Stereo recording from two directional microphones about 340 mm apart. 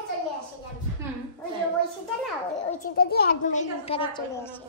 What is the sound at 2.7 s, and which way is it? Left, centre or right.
A child's voice, left.